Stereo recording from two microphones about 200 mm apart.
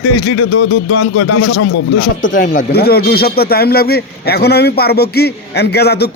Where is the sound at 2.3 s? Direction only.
40° left (ahead or behind).